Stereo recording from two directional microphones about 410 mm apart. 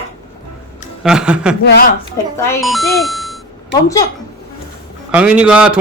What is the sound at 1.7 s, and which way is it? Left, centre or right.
Speech, left.